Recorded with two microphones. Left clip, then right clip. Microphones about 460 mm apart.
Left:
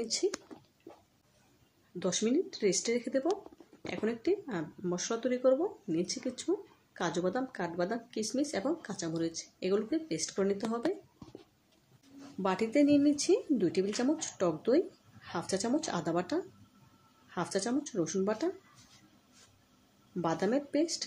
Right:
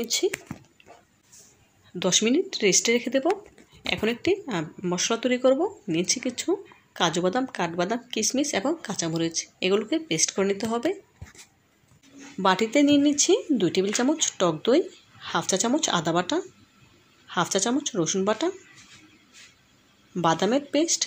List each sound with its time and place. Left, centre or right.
0.0 s speech: right
2.0 s speech: right
12.4 s speech: right
20.2 s speech: right